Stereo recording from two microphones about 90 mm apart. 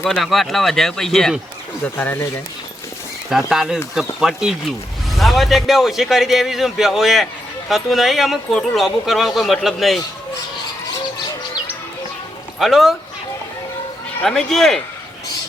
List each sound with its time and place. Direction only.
0.0 s speech: centre (ahead or behind)
1.8 s speech: 25° left (ahead or behind)
3.2 s speech: 5° right (ahead or behind)
12.5 s a man's voice: centre (ahead or behind)
14.3 s speech: 5° left (ahead or behind)